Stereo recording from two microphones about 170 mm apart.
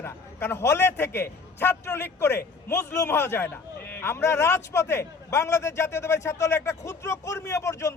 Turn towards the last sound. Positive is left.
turn(degrees=15)  # may be behind; listen again after turning